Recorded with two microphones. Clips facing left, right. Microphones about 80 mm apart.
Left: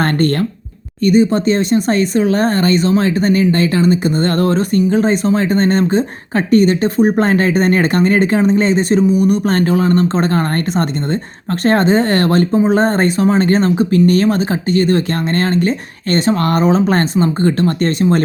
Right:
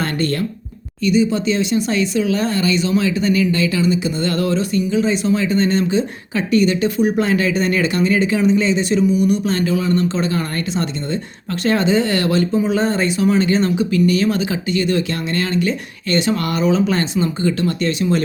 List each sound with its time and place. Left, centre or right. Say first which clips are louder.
0.0 s speech: left 5 dB; left